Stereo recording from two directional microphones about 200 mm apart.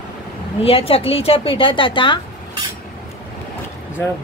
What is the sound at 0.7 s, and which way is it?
A woman's voice, 30° left (ahead or behind).